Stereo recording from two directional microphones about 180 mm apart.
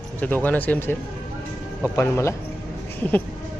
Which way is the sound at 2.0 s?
15° left (ahead or behind).